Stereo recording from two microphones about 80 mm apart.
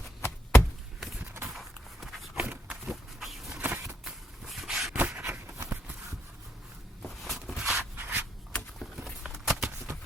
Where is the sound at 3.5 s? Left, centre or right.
Right.